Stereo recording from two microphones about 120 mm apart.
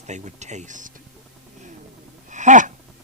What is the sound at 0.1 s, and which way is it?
Speech, 75° right (ahead or behind).